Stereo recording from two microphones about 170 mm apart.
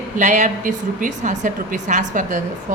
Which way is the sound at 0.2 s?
45° right (ahead or behind).